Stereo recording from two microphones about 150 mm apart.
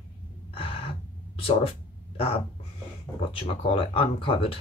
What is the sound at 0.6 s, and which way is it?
Gasp, 40° left (ahead or behind).